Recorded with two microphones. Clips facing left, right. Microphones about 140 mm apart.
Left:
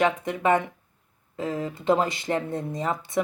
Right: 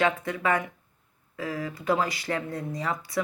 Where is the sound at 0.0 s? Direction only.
20° left (ahead or behind).